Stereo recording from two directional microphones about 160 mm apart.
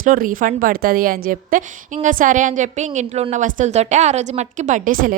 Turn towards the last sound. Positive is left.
turn(degrees=-60)  # may be behind; listen again after turning